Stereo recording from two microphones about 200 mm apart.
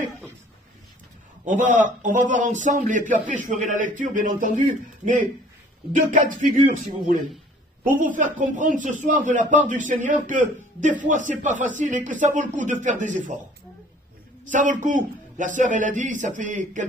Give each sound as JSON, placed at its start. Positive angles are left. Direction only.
{"t": 1.4, "sound": "speech", "side_deg": -40}
{"t": 8.0, "sound": "speech", "side_deg": -40}
{"t": 14.5, "sound": "speech", "side_deg": -40}